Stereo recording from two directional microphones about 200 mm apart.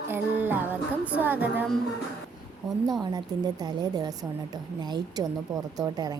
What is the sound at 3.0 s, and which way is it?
Speech, 20° right (ahead or behind).